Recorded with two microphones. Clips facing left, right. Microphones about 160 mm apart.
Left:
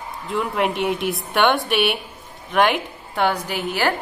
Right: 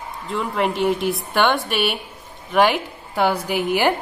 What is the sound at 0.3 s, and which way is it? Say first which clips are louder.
A woman's voice: even; centre (ahead or behind).